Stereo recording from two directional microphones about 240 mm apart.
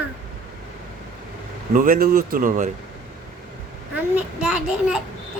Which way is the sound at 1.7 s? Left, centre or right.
Right.